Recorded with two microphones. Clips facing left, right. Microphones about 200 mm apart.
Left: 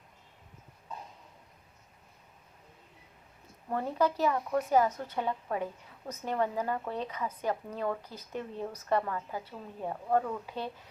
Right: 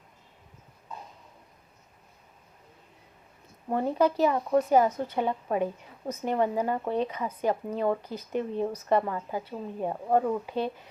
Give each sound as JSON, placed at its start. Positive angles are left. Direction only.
{"t": 3.7, "sound": "a woman's voice", "side_deg": -20}